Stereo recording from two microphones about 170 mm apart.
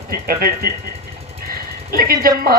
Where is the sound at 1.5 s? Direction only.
60° right (ahead or behind).